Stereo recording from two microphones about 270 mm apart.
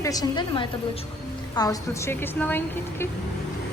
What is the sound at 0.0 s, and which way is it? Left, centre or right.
A woman's voice, centre.